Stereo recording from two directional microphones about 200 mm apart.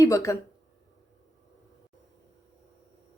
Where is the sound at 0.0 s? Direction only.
15° left (ahead or behind).